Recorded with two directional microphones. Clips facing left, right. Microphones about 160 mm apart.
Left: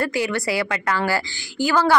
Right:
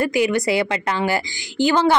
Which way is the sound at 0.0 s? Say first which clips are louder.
Right 4 dB; 15° right (ahead or behind).